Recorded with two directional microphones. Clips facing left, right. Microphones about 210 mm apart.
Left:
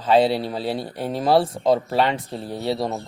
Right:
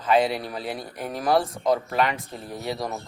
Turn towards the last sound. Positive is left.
turn(degrees=30)  # may be behind; listen again after turning